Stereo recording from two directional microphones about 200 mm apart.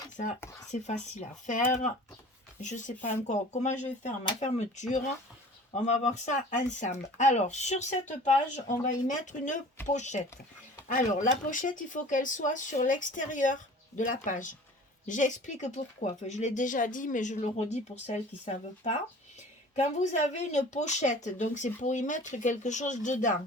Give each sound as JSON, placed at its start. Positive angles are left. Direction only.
{"t": 0.7, "sound": "speech", "side_deg": 35}